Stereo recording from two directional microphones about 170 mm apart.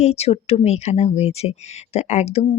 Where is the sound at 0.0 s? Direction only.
40° left (ahead or behind).